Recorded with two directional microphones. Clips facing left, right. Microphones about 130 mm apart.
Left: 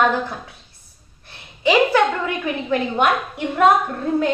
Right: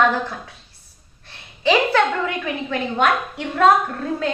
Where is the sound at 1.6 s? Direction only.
10° left (ahead or behind).